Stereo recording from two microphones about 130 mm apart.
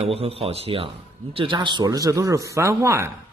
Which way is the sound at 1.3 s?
40° right (ahead or behind).